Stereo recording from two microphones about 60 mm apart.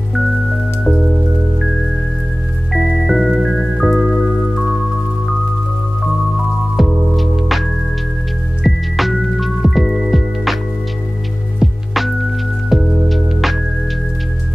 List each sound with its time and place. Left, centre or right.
2.7 s music: centre
6.8 s music: centre
11.6 s music: centre